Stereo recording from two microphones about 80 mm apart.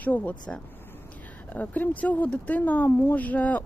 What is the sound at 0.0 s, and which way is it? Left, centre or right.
Speech, centre.